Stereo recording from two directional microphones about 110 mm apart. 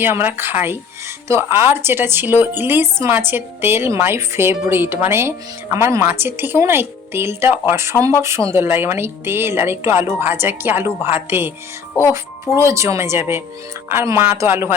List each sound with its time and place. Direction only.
0.0 s a woman's voice: 20° right (ahead or behind)